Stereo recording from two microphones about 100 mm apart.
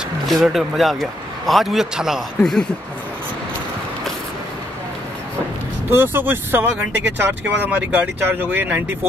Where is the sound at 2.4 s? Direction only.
5° left (ahead or behind).